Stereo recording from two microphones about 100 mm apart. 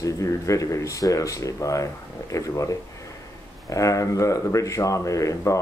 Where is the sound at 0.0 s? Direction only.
35° left (ahead or behind).